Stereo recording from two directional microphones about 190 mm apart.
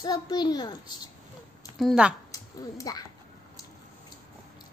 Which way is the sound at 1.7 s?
Centre (ahead or behind).